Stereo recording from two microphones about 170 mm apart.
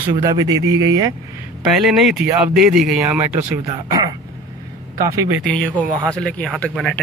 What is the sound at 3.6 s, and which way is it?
Speech, 20° right (ahead or behind).